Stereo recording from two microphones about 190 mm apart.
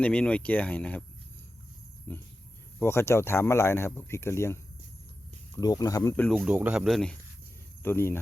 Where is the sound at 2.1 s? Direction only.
10° left (ahead or behind).